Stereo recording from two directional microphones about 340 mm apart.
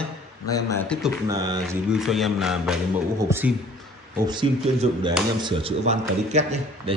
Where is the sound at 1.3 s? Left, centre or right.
Centre.